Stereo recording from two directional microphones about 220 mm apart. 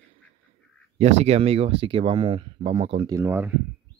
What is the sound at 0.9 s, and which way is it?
Speech, 30° right (ahead or behind).